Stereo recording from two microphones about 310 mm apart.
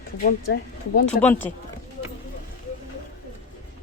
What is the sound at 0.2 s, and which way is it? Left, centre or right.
Speech, left.